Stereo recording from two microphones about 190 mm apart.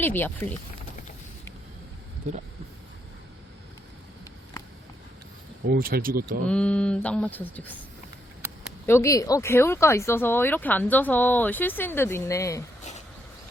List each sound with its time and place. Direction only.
0.0 s speech: 10° left (ahead or behind)
5.6 s speech: 50° right (ahead or behind)
6.4 s speech: 5° left (ahead or behind)
8.9 s speech: 15° left (ahead or behind)